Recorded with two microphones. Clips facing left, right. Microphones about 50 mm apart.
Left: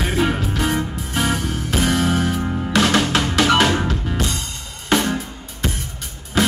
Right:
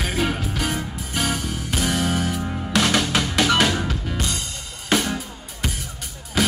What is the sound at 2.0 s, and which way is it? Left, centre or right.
Music, left.